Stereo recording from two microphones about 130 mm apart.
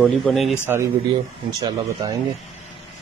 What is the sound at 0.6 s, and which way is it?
Speech, 20° right (ahead or behind).